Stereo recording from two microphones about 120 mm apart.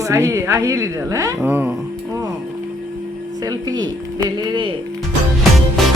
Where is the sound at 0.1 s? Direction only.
25° right (ahead or behind).